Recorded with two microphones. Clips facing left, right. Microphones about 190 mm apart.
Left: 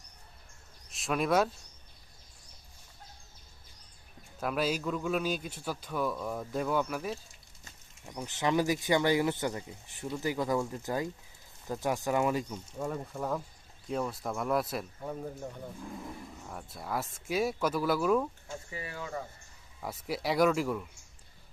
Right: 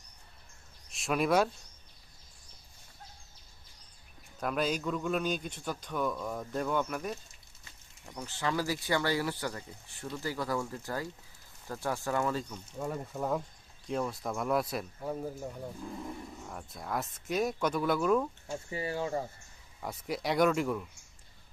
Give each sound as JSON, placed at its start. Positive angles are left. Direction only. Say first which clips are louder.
{"t": 0.9, "sound": "speech", "louder": "right 1 dB", "side_deg": 0}
{"t": 4.4, "sound": "a man's voice", "louder": "even", "side_deg": 5}
{"t": 8.0, "sound": "speech", "louder": "left 3 dB", "side_deg": 15}
{"t": 12.8, "sound": "a man's voice", "louder": "even", "side_deg": -5}
{"t": 18.7, "sound": "speech", "louder": "right 7 dB", "side_deg": -30}
{"t": 19.8, "sound": "a man's voice", "louder": "left 1 dB", "side_deg": 0}